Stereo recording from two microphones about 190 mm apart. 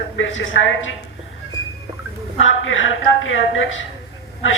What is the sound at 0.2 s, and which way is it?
Speech, 80° left.